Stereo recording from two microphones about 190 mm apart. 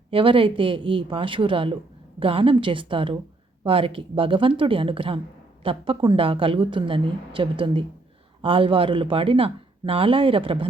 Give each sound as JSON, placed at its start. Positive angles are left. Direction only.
{"t": 0.1, "sound": "speech", "side_deg": -30}